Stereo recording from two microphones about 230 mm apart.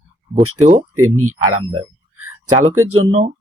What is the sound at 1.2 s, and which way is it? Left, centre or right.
Speech, right.